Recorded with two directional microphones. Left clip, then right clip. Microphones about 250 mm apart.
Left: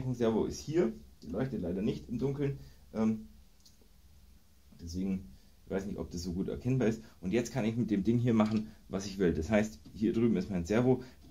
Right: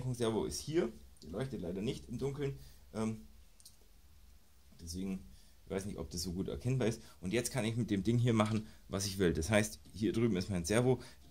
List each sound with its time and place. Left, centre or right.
0.1 s speech: right
4.8 s speech: right